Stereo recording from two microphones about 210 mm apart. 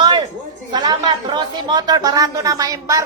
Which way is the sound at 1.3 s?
20° right (ahead or behind).